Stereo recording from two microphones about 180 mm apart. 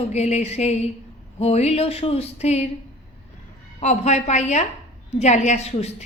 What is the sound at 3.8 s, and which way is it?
A woman's voice, 40° left (ahead or behind).